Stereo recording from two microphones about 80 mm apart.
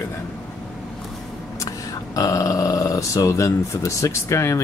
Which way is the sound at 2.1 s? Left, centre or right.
Left.